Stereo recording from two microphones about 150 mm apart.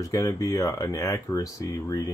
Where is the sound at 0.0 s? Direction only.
20° left (ahead or behind).